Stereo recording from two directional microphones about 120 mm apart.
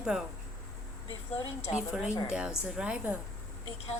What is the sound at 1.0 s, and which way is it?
Speech, 55° left (ahead or behind).